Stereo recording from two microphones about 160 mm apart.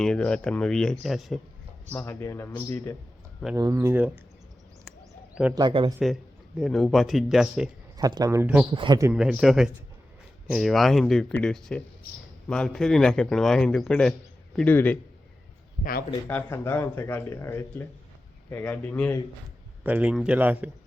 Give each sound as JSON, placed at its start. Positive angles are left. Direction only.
{"t": 0.0, "sound": "a man's voice", "side_deg": 5}
{"t": 1.9, "sound": "speech", "side_deg": 10}
{"t": 3.5, "sound": "speech", "side_deg": -20}
{"t": 5.5, "sound": "speech", "side_deg": -30}
{"t": 6.6, "sound": "a man's voice", "side_deg": 0}
{"t": 7.9, "sound": "speech", "side_deg": -25}
{"t": 8.7, "sound": "speech", "side_deg": -30}
{"t": 9.1, "sound": "a man's voice", "side_deg": -5}
{"t": 15.8, "sound": "speech", "side_deg": 65}
{"t": 16.3, "sound": "speech", "side_deg": 15}
{"t": 19.8, "sound": "speech", "side_deg": -10}